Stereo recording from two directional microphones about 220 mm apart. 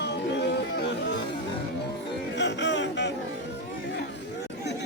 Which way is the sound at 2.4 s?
50° left (ahead or behind).